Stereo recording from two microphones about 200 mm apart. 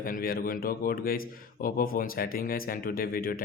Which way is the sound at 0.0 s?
45° left (ahead or behind).